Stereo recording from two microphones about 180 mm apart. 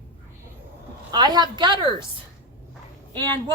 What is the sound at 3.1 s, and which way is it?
Speech, 10° left (ahead or behind).